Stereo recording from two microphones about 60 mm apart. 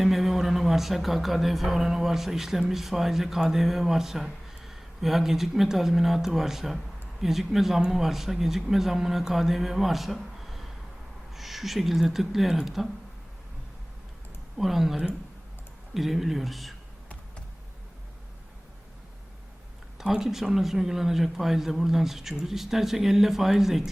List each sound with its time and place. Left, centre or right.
0.0 s speech: centre
14.6 s speech: centre
20.0 s speech: centre